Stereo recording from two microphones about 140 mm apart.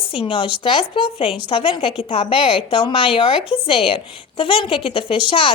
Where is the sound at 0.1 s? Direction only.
40° left (ahead or behind).